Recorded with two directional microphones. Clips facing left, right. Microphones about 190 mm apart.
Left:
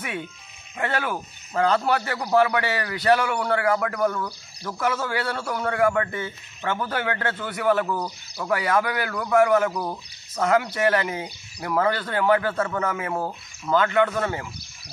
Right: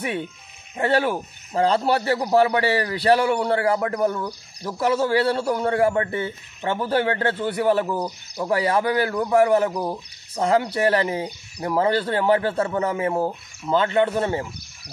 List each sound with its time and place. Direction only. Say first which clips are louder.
0.0 s a man's voice: right 5 dB; 30° right (ahead or behind)